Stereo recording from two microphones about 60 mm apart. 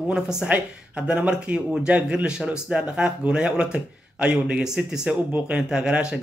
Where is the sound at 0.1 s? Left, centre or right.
Centre.